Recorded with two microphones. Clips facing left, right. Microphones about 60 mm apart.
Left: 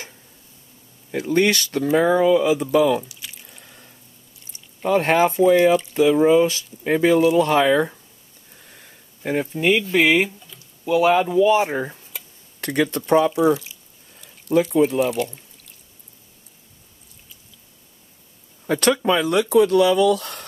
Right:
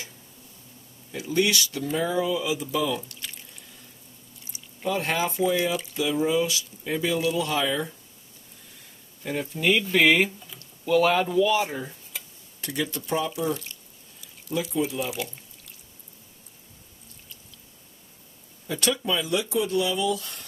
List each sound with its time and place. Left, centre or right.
1.1 s speech: left
3.1 s drip: centre
4.8 s speech: left
9.2 s speech: left
9.8 s speech: centre; by 11.7 s left
11.7 s speech: left
12.5 s speech: left
14.5 s speech: left
18.7 s speech: left